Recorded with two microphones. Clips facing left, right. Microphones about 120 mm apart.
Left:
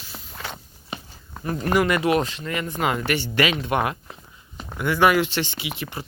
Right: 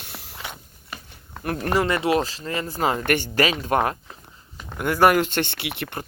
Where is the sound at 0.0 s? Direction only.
70° right (ahead or behind).